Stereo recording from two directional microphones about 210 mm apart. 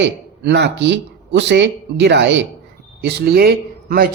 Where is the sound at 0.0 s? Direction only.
55° right (ahead or behind).